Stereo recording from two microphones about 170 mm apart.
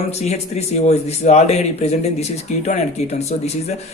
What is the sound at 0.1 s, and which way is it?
Speech, 40° left (ahead or behind).